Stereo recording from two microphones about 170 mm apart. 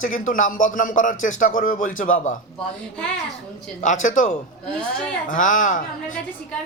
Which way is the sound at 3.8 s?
45° left (ahead or behind).